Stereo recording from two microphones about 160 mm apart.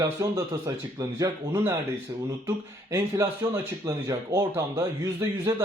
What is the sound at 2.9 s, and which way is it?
Speech, 20° right (ahead or behind).